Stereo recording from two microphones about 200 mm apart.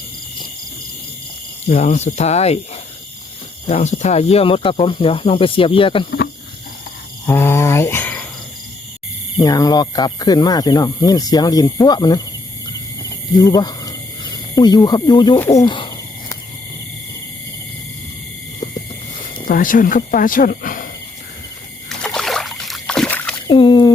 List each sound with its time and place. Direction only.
1.6 s speech: 35° left (ahead or behind)
3.7 s speech: 35° left (ahead or behind)
7.3 s cricket: 10° left (ahead or behind)
9.4 s speech: 20° left (ahead or behind)
13.3 s speech: 20° left (ahead or behind)
19.5 s speech: 45° left (ahead or behind)
21.8 s boat: centre (ahead or behind)
23.5 s a sound: 25° left (ahead or behind)